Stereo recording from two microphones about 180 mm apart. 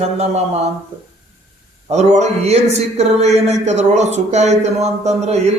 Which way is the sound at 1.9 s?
40° right (ahead or behind).